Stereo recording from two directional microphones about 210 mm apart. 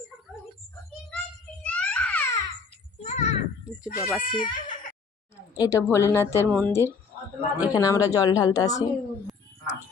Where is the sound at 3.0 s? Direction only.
35° left (ahead or behind).